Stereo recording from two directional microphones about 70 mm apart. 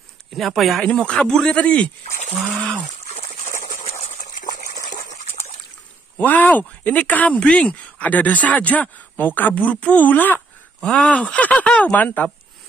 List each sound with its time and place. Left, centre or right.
0.3 s speech: centre
0.8 s speech: centre
6.1 s speech: left
10.8 s speech: centre